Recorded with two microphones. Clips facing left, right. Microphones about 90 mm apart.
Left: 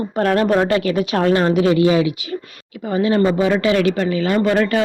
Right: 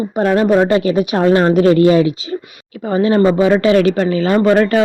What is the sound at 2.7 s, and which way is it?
A man's voice, 40° right (ahead or behind).